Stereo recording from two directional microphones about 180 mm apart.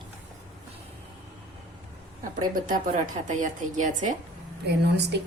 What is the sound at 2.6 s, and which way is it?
A woman's voice, 50° right (ahead or behind).